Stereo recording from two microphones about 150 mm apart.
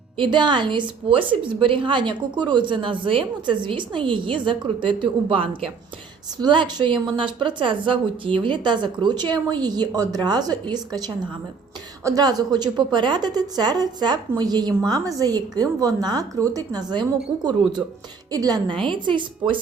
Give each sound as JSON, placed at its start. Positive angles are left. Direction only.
{"t": 0.2, "sound": "a woman's voice", "side_deg": -30}